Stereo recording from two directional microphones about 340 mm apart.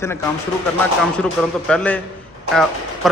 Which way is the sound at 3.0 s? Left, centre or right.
Centre.